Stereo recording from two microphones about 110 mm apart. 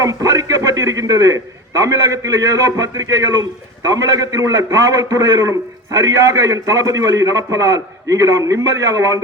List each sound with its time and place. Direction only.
0.0 s a man's voice: 30° right (ahead or behind)